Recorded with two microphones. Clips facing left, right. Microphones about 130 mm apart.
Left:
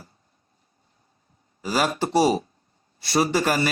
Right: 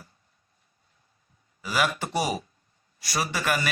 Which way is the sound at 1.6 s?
35° left (ahead or behind).